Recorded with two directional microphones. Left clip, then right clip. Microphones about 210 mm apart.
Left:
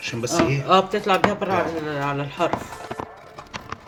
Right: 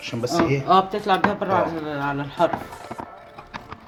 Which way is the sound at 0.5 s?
15° right (ahead or behind).